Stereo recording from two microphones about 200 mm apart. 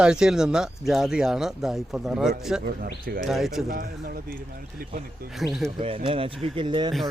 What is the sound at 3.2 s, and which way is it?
Speech, centre (ahead or behind).